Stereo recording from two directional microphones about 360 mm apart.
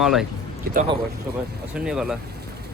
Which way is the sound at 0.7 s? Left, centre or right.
Right.